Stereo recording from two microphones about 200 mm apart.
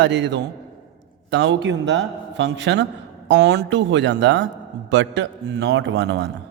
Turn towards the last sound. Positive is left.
turn(degrees=-60)  # may be behind; listen again after turning